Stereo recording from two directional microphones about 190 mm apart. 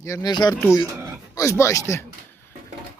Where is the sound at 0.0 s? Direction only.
20° left (ahead or behind).